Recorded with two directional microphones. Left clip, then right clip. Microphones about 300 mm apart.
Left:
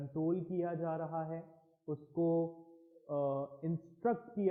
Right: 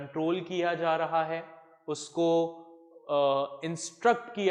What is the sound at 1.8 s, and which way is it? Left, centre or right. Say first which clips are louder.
Mantra: right 7 dB; right.